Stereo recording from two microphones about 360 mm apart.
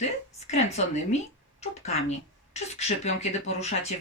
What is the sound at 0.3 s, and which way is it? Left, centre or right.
A woman's voice, centre.